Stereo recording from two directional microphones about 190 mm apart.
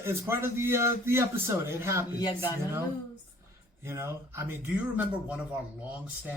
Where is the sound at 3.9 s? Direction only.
15° right (ahead or behind).